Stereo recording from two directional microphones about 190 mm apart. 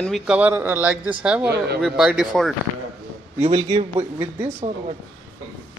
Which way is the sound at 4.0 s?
10° right (ahead or behind).